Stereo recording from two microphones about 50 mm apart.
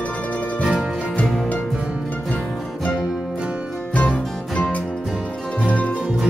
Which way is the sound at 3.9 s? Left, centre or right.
Left.